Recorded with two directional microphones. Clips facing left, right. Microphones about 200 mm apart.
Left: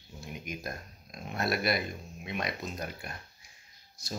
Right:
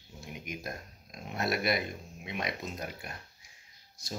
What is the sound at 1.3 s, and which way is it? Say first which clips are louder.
Speech: even; 20° right (ahead or behind).